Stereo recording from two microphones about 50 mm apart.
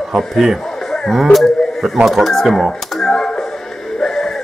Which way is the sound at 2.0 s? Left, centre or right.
Centre.